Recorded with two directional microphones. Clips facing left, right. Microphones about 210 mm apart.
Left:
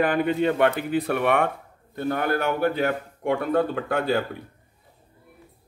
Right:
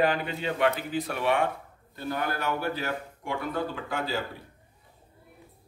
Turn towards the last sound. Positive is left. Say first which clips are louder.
# left 8 dB
turn(degrees=60)  # may be behind; listen again after turning